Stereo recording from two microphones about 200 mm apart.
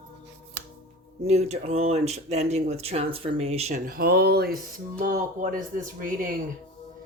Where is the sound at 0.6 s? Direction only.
55° right (ahead or behind).